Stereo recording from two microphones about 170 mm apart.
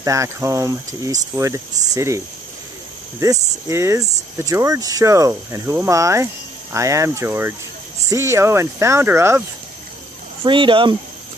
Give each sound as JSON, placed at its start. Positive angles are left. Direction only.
{"t": 0.0, "sound": "speech", "side_deg": -20}
{"t": 10.4, "sound": "speech", "side_deg": -30}